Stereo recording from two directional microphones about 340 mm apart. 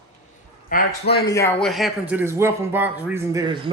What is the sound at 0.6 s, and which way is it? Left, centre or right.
Speech, left.